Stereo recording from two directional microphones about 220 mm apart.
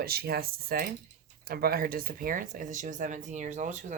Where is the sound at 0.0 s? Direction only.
45° right (ahead or behind).